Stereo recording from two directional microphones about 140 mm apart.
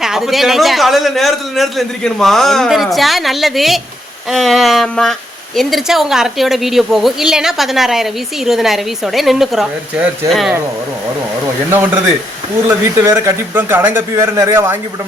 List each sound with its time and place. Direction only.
0.0 s a man's voice: 5° right (ahead or behind)
12.6 s speech: 20° right (ahead or behind)